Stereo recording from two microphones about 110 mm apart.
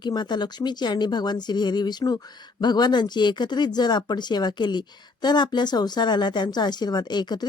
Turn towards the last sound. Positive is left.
turn(degrees=40)  # may be behind; listen again after turning